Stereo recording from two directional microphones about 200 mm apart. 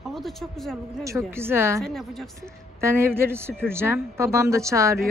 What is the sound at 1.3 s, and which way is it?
Speech, 10° right (ahead or behind).